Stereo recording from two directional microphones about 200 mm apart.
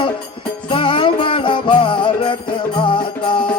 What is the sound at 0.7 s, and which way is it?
Music, 25° left (ahead or behind).